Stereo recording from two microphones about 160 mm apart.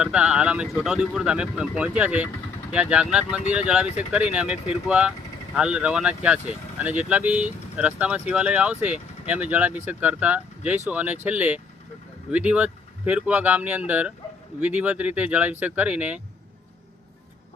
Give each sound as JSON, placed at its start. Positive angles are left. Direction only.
{"t": 0.0, "sound": "speech", "side_deg": -5}